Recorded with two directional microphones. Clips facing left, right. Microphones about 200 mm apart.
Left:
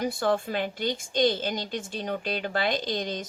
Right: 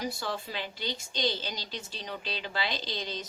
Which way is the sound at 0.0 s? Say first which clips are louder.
Left 9 dB; 55° left (ahead or behind).